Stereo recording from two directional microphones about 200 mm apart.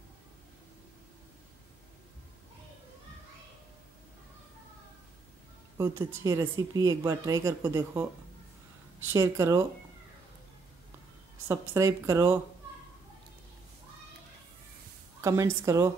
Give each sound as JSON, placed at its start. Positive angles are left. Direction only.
{"t": 5.8, "sound": "a woman's voice", "side_deg": -15}
{"t": 9.1, "sound": "a woman's voice", "side_deg": -15}
{"t": 11.7, "sound": "a woman's voice", "side_deg": -15}
{"t": 15.2, "sound": "a woman's voice", "side_deg": -15}